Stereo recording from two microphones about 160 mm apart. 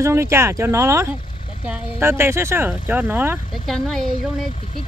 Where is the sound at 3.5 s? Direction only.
Centre (ahead or behind).